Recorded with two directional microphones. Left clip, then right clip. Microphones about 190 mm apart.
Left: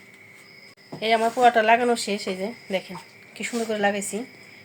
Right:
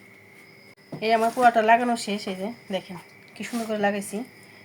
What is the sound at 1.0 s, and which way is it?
A woman's voice, 10° left (ahead or behind).